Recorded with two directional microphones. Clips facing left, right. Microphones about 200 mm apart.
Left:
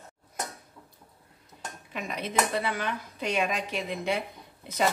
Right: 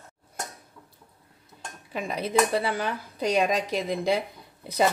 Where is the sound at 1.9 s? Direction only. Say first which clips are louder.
Right 6 dB; 35° right (ahead or behind).